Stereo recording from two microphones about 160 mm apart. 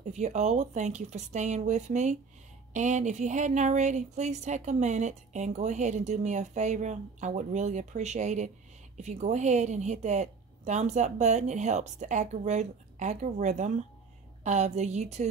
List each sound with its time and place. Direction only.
0.1 s speech: 45° right (ahead or behind)